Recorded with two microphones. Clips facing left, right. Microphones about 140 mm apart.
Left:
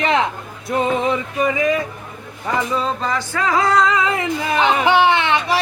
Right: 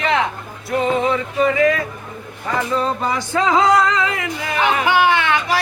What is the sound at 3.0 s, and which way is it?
Music, 20° right (ahead or behind).